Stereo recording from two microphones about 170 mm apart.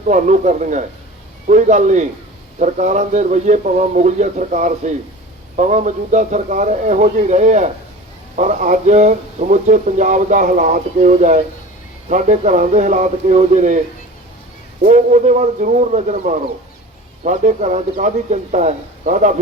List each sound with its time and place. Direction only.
0.1 s speech: 45° right (ahead or behind)
14.8 s speech: 45° right (ahead or behind)